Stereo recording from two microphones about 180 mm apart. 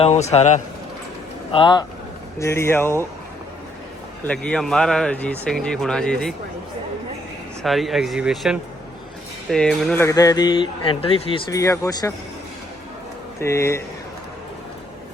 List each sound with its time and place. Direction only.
0.0 s a man's voice: 35° left (ahead or behind)
1.5 s a man's voice: 25° left (ahead or behind)
2.4 s speech: 15° left (ahead or behind)
4.2 s speech: 5° left (ahead or behind)
7.6 s speech: centre (ahead or behind)
10.0 s a man's voice: 20° left (ahead or behind)
11.5 s a man's voice: 20° left (ahead or behind)
13.4 s speech: 15° left (ahead or behind)